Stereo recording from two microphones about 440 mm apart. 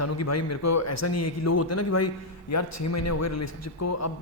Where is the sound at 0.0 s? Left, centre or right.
Left.